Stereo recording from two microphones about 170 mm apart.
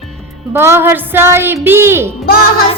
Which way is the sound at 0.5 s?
15° right (ahead or behind).